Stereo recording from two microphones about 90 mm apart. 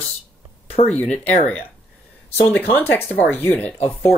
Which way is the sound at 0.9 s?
15° left (ahead or behind).